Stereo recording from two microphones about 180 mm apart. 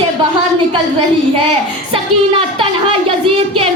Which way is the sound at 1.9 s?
30° right (ahead or behind).